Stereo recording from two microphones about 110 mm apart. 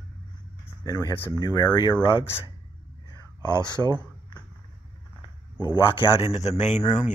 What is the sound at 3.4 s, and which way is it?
Speech, 40° left (ahead or behind).